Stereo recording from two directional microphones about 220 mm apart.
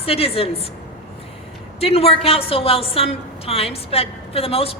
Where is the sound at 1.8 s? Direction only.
25° left (ahead or behind).